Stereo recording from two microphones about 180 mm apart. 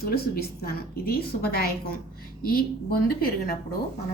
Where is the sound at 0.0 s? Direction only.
60° left (ahead or behind).